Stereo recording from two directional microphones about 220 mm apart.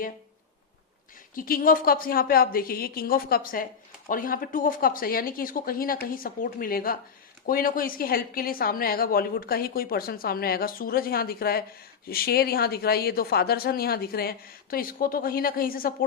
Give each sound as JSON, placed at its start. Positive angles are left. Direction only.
{"t": 1.4, "sound": "a woman's voice", "side_deg": 40}